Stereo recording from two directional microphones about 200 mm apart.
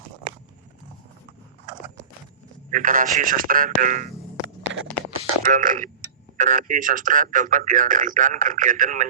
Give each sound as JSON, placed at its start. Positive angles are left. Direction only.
{"t": 2.6, "sound": "speech", "side_deg": -40}
{"t": 5.1, "sound": "a sound", "side_deg": -40}
{"t": 6.3, "sound": "speech", "side_deg": -40}